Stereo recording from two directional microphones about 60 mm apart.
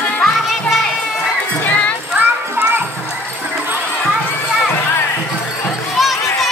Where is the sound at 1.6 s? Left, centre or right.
Left.